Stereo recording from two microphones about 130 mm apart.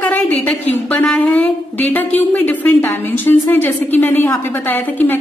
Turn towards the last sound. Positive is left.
turn(degrees=15)  # may be behind; listen again after turning